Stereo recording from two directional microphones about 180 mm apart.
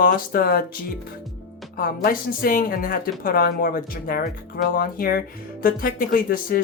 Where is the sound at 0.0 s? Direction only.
55° left (ahead or behind).